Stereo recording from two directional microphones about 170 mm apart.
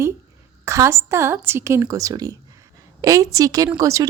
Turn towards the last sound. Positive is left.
turn(degrees=-20)  # may be behind; listen again after turning